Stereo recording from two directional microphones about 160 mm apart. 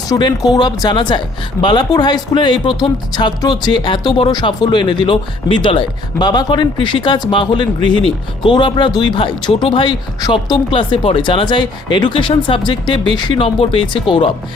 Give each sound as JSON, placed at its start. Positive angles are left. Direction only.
{"t": 0.1, "sound": "speech", "side_deg": 25}